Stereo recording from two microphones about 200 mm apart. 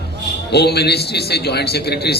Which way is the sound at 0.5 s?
55° left (ahead or behind).